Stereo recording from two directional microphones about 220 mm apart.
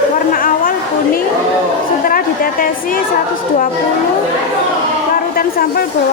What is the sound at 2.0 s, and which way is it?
Speech, 40° left (ahead or behind).